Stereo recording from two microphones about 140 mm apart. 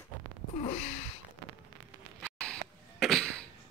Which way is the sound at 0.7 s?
45° left (ahead or behind).